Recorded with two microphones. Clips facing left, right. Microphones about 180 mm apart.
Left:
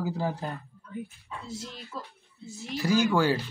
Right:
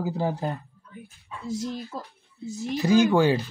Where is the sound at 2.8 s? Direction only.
20° right (ahead or behind).